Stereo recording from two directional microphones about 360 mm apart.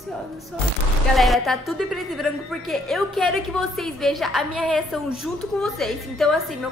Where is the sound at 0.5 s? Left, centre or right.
Centre.